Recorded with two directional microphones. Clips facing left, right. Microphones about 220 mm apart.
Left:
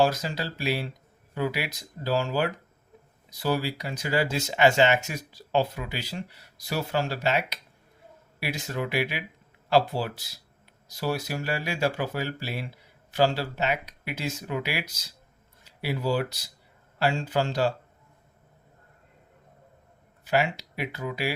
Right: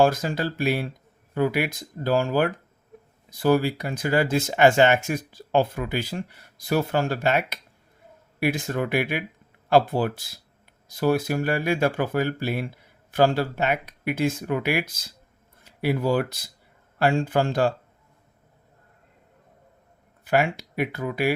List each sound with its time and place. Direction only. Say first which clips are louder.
0.0 s speech: right 4 dB; 50° right (ahead or behind)
20.2 s speech: right 3 dB; 50° right (ahead or behind)